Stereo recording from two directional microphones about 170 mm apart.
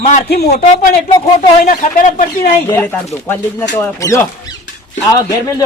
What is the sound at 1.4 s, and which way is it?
Speech, 55° left (ahead or behind).